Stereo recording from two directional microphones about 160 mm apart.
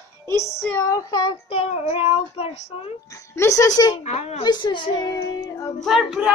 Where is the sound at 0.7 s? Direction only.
20° left (ahead or behind); by 2.9 s 35° left (ahead or behind).